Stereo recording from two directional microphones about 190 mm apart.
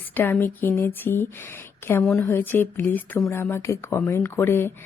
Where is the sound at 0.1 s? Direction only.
10° left (ahead or behind).